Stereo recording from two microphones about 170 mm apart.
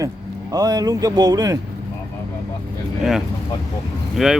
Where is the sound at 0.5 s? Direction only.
20° right (ahead or behind).